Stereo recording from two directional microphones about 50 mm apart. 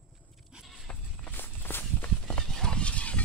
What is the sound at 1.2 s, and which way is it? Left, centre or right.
Walk, left.